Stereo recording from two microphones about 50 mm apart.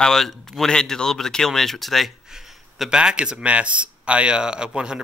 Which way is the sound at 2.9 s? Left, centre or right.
Centre.